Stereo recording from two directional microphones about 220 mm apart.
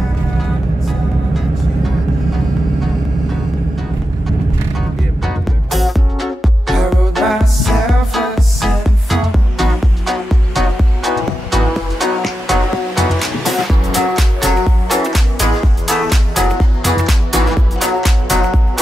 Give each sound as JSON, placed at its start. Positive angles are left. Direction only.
{"t": 5.2, "sound": "music", "side_deg": 0}